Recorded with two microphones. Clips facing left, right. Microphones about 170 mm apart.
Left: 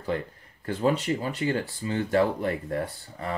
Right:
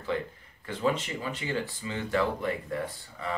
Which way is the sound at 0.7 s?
40° left (ahead or behind).